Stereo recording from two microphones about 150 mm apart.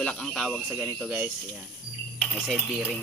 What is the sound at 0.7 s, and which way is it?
Speech, 10° right (ahead or behind).